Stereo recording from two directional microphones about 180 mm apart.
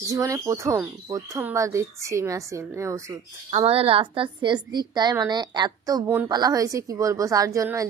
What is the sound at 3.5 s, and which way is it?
A woman's voice, 35° right (ahead or behind).